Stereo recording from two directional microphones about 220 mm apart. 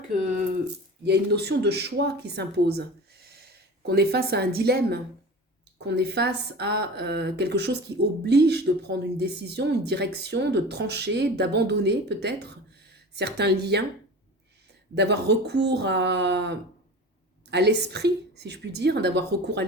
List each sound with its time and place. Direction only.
1.0 s speech: 50° right (ahead or behind)
14.9 s speech: 50° right (ahead or behind)